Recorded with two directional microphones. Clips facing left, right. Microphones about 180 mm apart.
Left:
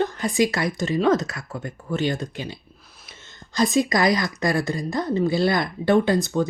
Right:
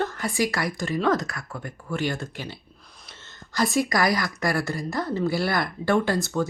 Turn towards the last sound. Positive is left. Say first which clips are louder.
# left 4 dB
turn(degrees=20)  # may be behind; listen again after turning